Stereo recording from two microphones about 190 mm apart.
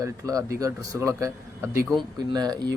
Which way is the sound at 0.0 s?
15° right (ahead or behind).